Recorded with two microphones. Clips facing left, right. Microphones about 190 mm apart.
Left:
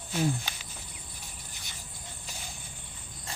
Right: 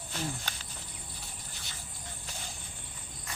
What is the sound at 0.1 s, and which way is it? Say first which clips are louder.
Cricket: left 8 dB; 10° left (ahead or behind).